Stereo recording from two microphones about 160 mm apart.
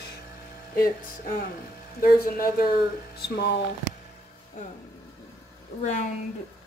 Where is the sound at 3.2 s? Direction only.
90° left.